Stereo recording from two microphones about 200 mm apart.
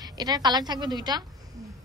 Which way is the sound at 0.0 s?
20° right (ahead or behind).